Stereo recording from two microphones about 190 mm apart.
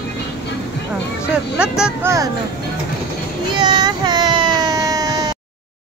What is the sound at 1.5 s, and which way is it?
Speech, 5° right (ahead or behind).